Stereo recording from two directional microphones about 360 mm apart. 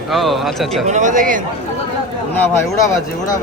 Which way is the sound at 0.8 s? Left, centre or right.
Centre.